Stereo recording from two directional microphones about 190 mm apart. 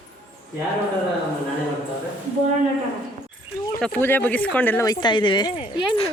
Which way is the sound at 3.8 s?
10° left (ahead or behind).